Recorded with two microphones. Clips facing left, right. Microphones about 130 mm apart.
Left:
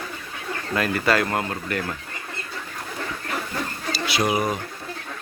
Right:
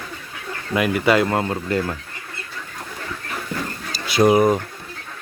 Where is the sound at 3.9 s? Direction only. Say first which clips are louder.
Right 8 dB; 45° right (ahead or behind).